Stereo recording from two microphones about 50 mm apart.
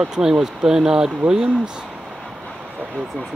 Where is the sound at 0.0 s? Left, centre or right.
Centre.